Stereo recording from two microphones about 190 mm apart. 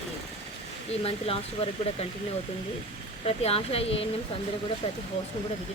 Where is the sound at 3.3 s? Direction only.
30° left (ahead or behind).